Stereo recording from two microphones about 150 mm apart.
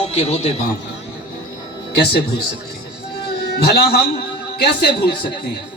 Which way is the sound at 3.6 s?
90° left.